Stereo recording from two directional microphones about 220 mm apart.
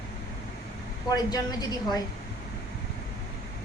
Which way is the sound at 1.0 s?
15° left (ahead or behind).